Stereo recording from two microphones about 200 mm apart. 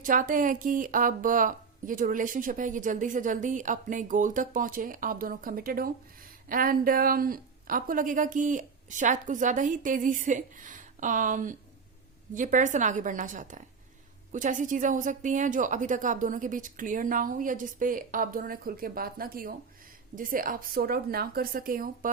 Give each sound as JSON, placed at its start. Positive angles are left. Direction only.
{"t": 0.0, "sound": "a woman's voice", "side_deg": -40}